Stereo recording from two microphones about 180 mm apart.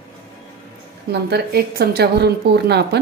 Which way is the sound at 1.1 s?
65° right (ahead or behind).